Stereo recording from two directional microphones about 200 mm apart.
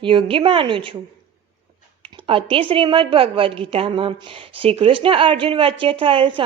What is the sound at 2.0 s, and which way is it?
A woman's voice, 25° right (ahead or behind).